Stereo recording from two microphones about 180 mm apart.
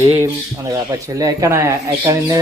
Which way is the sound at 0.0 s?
15° right (ahead or behind).